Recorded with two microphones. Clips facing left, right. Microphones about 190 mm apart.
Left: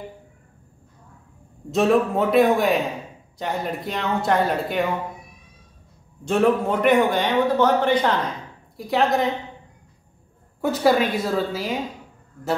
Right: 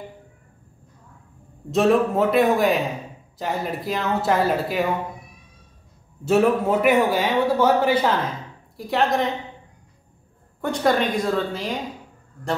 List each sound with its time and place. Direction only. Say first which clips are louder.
1.7 s a man's voice: right 1 dB; centre (ahead or behind)
6.2 s a man's voice: right 1 dB; 5° right (ahead or behind)
10.6 s a man's voice: left 2 dB; 5° left (ahead or behind)